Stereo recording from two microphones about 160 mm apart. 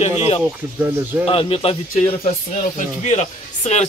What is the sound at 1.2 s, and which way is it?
Speech, 35° left (ahead or behind).